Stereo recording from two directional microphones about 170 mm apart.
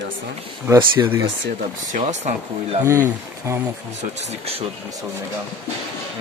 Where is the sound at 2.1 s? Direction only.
40° right (ahead or behind).